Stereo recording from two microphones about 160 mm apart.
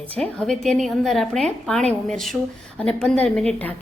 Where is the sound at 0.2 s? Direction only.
5° left (ahead or behind).